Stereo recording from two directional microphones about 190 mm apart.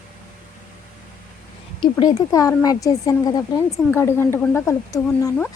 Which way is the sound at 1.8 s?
20° left (ahead or behind).